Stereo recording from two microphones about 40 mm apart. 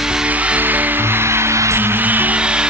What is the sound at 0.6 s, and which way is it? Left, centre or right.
Music, right.